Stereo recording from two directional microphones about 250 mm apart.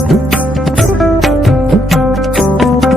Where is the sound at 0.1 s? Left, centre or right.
Centre.